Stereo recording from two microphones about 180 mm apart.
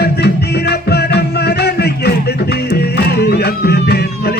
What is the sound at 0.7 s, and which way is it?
Music, 65° left (ahead or behind).